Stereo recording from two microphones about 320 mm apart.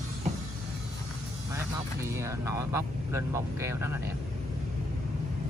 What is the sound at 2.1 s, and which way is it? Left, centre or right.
Speech, centre.